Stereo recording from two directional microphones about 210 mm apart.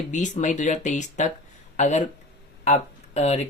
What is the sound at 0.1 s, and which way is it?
Speech, 35° left (ahead or behind).